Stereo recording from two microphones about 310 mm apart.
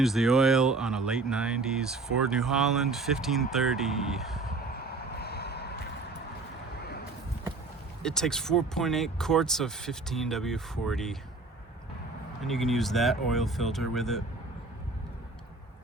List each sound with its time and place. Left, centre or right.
0.0 s speech: centre
4.8 s vehicle: left
8.0 s speech: centre
12.4 s speech: centre